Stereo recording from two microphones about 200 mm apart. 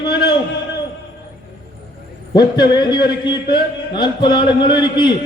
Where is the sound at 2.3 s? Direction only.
20° left (ahead or behind).